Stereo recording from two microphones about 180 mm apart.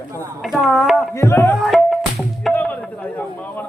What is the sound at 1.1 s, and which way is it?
Speech, 15° left (ahead or behind).